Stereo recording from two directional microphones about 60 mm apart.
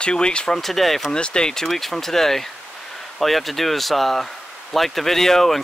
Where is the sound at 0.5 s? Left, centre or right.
Centre.